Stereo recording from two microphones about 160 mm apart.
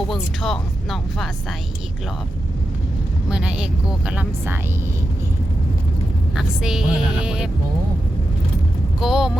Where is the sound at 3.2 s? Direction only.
5° right (ahead or behind).